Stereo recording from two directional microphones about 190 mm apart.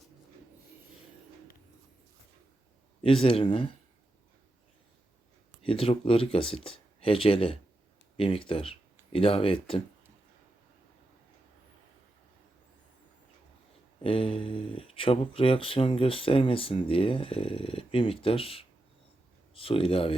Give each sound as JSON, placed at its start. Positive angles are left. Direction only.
{"t": 3.0, "sound": "speech", "side_deg": 25}
{"t": 5.6, "sound": "speech", "side_deg": 30}
{"t": 14.0, "sound": "speech", "side_deg": 30}